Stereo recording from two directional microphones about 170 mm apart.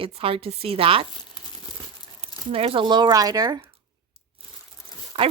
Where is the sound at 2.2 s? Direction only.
35° right (ahead or behind).